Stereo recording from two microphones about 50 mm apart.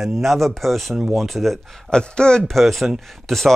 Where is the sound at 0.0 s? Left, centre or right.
Centre.